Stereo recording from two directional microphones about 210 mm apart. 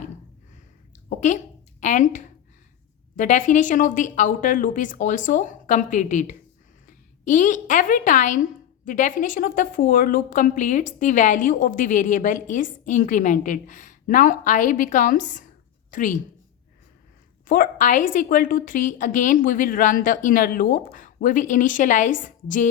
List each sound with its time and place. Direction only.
1.8 s a woman's voice: 35° left (ahead or behind)
17.4 s a woman's voice: 40° left (ahead or behind)